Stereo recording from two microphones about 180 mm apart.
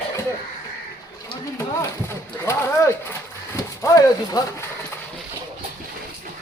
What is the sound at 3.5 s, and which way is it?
Speech, 20° left (ahead or behind).